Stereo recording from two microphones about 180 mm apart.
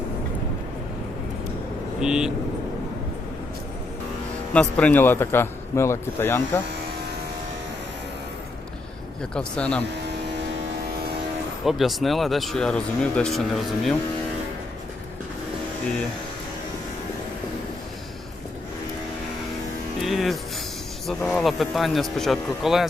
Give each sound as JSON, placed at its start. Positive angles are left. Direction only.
{"t": 2.0, "sound": "speech", "side_deg": -5}
{"t": 4.5, "sound": "a man's voice", "side_deg": 10}
{"t": 9.3, "sound": "a man's voice", "side_deg": 5}
{"t": 10.1, "sound": "a sound", "side_deg": -70}
{"t": 11.6, "sound": "speech", "side_deg": 0}
{"t": 20.0, "sound": "music", "side_deg": 0}
{"t": 21.2, "sound": "speech", "side_deg": 0}